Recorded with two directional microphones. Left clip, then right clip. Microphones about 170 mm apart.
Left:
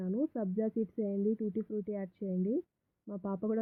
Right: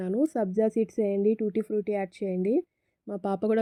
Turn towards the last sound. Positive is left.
turn(degrees=-30)  # may be behind; listen again after turning